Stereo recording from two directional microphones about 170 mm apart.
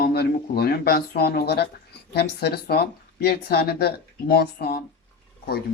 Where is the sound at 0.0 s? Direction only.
65° left (ahead or behind).